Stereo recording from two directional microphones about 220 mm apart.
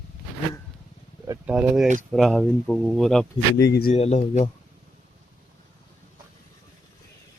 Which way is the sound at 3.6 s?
45° left (ahead or behind).